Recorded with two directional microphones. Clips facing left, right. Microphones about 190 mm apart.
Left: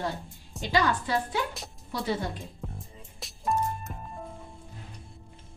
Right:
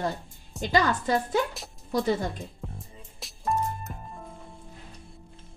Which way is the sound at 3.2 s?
Centre (ahead or behind).